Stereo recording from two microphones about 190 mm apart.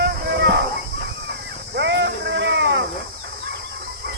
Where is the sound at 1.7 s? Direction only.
65° right (ahead or behind).